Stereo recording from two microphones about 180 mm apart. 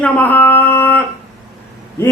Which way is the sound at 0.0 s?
10° left (ahead or behind).